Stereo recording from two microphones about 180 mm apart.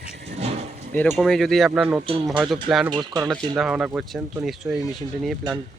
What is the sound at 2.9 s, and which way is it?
Speech, 20° right (ahead or behind).